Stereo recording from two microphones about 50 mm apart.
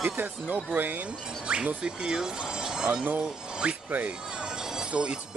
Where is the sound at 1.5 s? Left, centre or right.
Centre.